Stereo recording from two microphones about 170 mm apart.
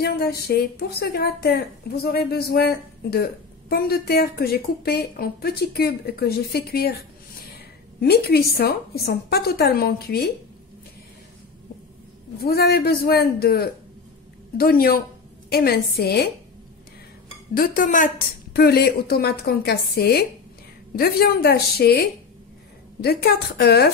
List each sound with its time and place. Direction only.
0.0 s a woman's voice: 70° left (ahead or behind)
12.4 s a woman's voice: 65° left (ahead or behind)
17.6 s a woman's voice: 50° left (ahead or behind)
18.6 s a woman's voice: 70° left (ahead or behind)